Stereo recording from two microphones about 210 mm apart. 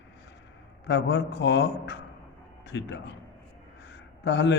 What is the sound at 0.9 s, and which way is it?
A man's voice, 55° left (ahead or behind).